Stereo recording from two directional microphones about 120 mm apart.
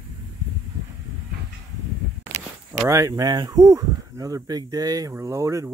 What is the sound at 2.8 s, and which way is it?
Speech, 25° right (ahead or behind).